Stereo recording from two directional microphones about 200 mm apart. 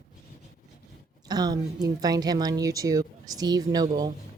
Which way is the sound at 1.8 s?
20° right (ahead or behind).